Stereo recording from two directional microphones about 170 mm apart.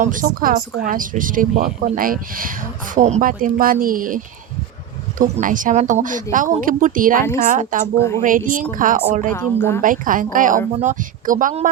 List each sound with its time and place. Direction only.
0.0 s speech: 50° right (ahead or behind)
7.9 s a woman's voice: 15° left (ahead or behind)
8.2 s speech: 50° right (ahead or behind)
9.3 s a woman's voice: 15° left (ahead or behind)
9.8 s speech: 55° right (ahead or behind)